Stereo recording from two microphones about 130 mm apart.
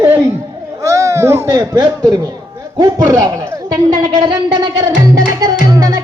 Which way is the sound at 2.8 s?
30° right (ahead or behind).